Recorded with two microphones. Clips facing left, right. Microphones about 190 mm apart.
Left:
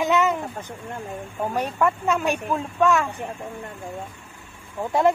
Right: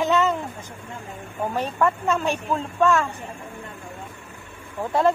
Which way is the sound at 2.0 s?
15° left (ahead or behind).